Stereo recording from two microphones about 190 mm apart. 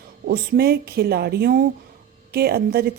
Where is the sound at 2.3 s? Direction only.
55° right (ahead or behind).